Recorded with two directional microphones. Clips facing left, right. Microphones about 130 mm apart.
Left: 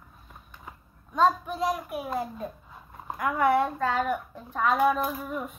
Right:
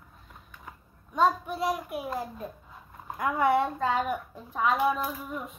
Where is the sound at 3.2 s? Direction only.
25° right (ahead or behind).